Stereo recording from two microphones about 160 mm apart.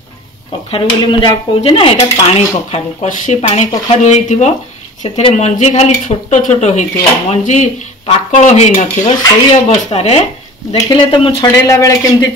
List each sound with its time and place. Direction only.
0.7 s speech: 30° left (ahead or behind)
1.7 s speech: 40° left (ahead or behind)
11.6 s speech: 20° left (ahead or behind)